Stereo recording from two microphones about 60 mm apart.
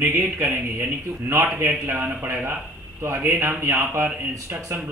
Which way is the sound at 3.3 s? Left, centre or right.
Right.